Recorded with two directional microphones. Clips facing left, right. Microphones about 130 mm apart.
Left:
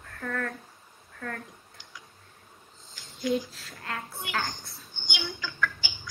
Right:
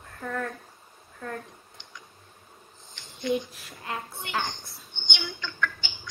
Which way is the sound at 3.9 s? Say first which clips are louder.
Right 2 dB; 20° right (ahead or behind).